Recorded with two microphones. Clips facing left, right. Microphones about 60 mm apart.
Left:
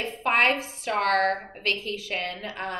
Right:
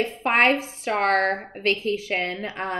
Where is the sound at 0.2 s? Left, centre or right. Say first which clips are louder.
Right 2 dB; right.